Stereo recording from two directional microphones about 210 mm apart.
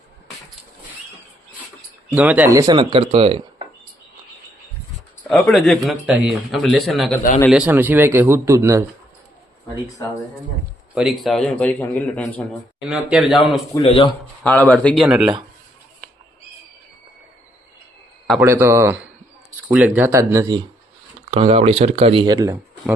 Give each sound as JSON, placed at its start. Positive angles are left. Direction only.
{"t": 2.1, "sound": "speech", "side_deg": -5}
{"t": 5.3, "sound": "a man's voice", "side_deg": 0}
{"t": 10.9, "sound": "speech", "side_deg": 0}
{"t": 13.8, "sound": "speech", "side_deg": 25}
{"t": 14.4, "sound": "speech", "side_deg": 5}
{"t": 18.3, "sound": "a man's voice", "side_deg": -10}
{"t": 21.2, "sound": "speech", "side_deg": -30}